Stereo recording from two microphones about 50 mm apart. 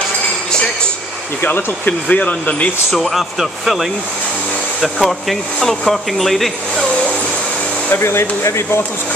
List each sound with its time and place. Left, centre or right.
1.9 s speech: left
2.9 s speech: centre
7.9 s speech: left